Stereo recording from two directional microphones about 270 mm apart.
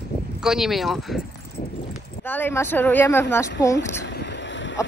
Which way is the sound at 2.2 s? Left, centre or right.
Centre.